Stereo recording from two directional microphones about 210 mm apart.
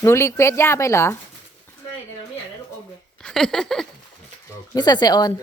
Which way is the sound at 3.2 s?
Centre (ahead or behind).